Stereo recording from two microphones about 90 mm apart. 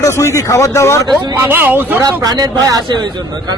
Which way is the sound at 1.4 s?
25° right (ahead or behind).